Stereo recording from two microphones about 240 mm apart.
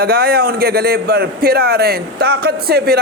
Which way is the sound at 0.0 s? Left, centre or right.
Right.